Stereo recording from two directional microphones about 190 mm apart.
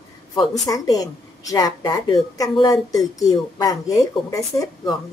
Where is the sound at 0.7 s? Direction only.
20° left (ahead or behind).